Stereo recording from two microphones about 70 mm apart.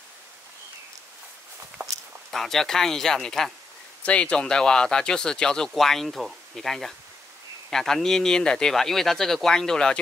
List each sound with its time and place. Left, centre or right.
1.8 s walk: right
2.3 s speech: centre